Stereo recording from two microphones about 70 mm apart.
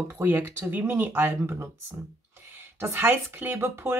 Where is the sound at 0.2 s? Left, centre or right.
Right.